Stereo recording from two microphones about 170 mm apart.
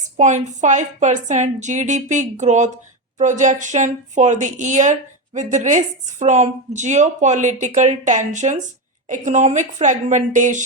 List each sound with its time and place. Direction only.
0.2 s a woman's voice: 45° right (ahead or behind)